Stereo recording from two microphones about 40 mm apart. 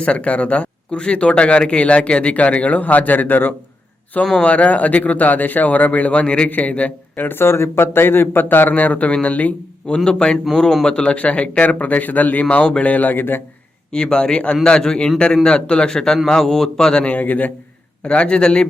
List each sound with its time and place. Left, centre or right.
0.0 s speech: left
4.2 s a man's voice: left
4.5 s speech: left
7.2 s speech: left
8.4 s speech: left
10.0 s a man's voice: centre; by 13.4 s left
13.9 s a man's voice: left
17.0 s speech: left
18.0 s a man's voice: left